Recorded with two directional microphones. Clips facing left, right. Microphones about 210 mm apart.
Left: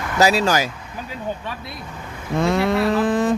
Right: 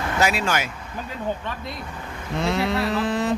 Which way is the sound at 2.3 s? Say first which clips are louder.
Left 5 dB; 50° left (ahead or behind).